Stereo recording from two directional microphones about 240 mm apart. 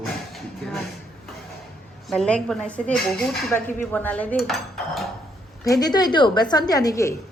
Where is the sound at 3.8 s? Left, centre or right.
Centre.